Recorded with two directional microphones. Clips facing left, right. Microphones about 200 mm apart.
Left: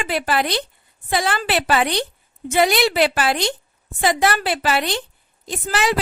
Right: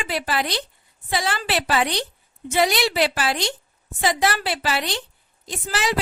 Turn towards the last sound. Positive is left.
turn(degrees=55)  # may be behind; listen again after turning